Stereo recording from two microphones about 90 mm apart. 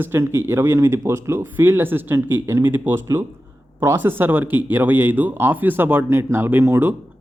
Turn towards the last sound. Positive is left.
turn(degrees=-25)  # may be behind; listen again after turning